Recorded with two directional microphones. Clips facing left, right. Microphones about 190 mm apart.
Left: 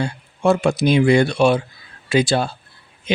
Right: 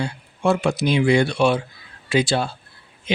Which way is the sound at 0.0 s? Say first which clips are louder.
Left 3 dB; 45° left (ahead or behind).